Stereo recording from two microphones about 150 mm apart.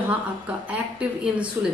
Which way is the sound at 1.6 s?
15° right (ahead or behind).